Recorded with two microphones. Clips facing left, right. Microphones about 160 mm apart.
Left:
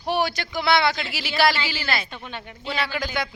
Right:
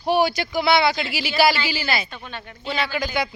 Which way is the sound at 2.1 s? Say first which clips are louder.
Even; 15° left (ahead or behind).